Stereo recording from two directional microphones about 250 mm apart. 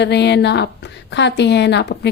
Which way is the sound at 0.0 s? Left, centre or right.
Left.